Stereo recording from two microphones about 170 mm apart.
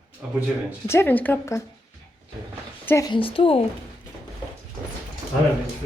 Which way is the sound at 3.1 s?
30° left (ahead or behind).